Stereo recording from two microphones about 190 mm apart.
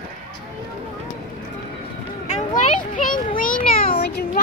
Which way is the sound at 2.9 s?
45° left (ahead or behind).